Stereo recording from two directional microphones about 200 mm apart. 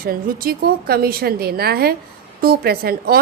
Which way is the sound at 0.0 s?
45° right (ahead or behind).